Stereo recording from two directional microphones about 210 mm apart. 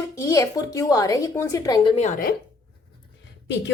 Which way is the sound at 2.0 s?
40° left (ahead or behind).